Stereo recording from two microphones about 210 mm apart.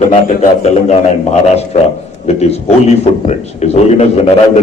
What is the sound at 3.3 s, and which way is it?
Speech, 30° left (ahead or behind).